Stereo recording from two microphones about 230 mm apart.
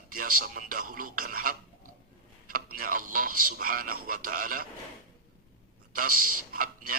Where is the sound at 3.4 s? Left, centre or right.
Right.